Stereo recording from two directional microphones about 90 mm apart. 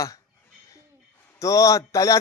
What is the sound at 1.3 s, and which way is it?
Speech, 35° left (ahead or behind).